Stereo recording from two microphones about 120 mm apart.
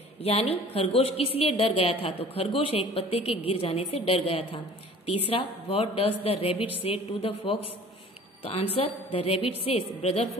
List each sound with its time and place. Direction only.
0.2 s a woman's voice: 55° left (ahead or behind)